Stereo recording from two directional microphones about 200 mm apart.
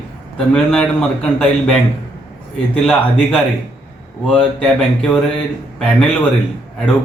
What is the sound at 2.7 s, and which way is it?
A man's voice, 5° left (ahead or behind).